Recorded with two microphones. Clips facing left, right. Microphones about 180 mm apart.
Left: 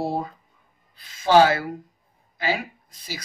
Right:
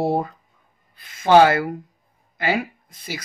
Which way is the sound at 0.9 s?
55° right (ahead or behind).